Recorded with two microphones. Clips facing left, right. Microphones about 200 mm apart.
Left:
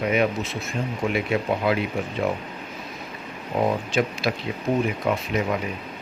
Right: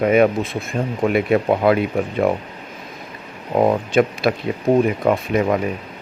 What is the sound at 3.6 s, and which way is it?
Speech, 55° right (ahead or behind).